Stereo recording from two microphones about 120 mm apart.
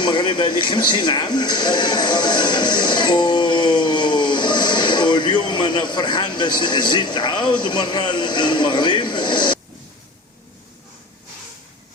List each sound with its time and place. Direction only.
0.0 s speech: 40° left (ahead or behind)